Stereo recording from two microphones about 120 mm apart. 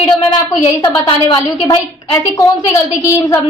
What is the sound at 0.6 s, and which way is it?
Speech, 30° left (ahead or behind).